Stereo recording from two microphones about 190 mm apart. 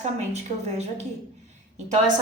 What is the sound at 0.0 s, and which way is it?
A woman's voice, 35° right (ahead or behind).